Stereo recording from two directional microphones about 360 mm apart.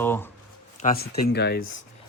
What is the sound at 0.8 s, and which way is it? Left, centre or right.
Speech, left.